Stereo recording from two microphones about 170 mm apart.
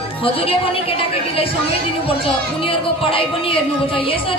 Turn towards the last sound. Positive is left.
turn(degrees=30)  # may be behind; listen again after turning